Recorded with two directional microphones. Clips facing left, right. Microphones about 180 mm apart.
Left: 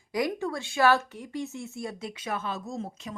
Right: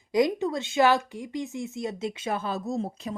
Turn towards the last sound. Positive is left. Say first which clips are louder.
# right 6 dB
turn(degrees=-35)  # may be behind; listen again after turning